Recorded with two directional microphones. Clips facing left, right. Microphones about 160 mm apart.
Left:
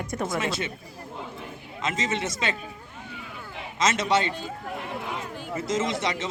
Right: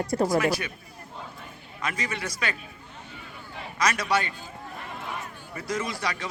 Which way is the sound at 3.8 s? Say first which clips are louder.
Left 2 dB; 25° left (ahead or behind).